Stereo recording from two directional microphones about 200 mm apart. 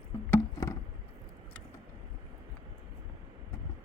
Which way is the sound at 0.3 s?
20° left (ahead or behind).